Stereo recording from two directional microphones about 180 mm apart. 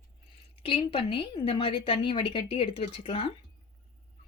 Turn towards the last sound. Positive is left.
turn(degrees=30)  # may be behind; listen again after turning